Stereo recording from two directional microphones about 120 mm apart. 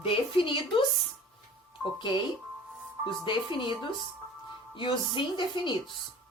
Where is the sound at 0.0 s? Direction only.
50° left (ahead or behind).